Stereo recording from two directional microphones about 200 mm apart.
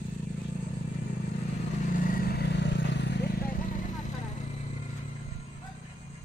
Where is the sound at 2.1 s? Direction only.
55° left (ahead or behind).